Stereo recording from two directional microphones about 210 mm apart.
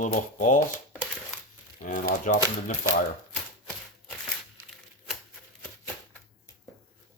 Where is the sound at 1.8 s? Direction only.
40° left (ahead or behind).